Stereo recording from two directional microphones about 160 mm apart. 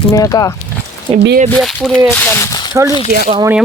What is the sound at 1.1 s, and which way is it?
Speech, 35° right (ahead or behind).